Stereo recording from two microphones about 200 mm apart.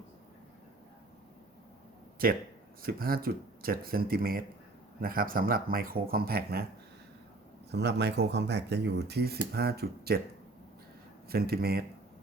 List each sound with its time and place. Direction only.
2.2 s speech: 45° right (ahead or behind)
7.7 s speech: 55° right (ahead or behind)
11.3 s speech: 50° right (ahead or behind)